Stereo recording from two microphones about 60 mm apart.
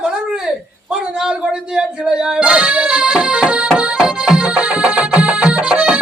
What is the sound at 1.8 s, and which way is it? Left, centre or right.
Music, centre.